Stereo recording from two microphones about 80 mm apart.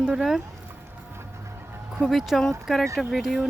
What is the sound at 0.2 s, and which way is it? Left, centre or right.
Speech, centre.